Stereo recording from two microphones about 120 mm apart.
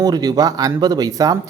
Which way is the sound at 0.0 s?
35° right (ahead or behind).